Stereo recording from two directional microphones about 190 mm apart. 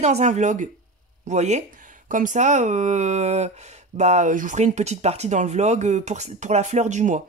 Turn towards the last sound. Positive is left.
turn(degrees=-40)  # may be behind; listen again after turning